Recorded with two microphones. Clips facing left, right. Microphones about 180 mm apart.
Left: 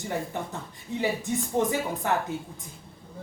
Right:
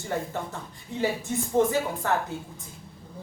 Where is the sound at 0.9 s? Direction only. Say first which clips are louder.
Right 1 dB; 15° left (ahead or behind).